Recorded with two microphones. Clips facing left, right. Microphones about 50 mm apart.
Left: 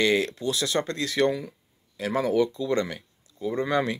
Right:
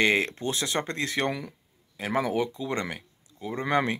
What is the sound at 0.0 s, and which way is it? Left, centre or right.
Speech, right.